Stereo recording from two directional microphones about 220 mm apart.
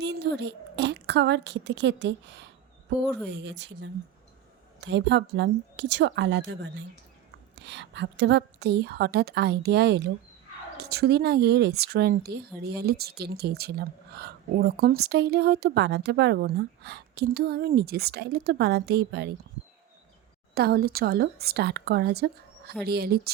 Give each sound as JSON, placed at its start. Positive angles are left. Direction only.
{"t": 0.0, "sound": "a woman's voice", "side_deg": -50}
{"t": 20.6, "sound": "speech", "side_deg": -45}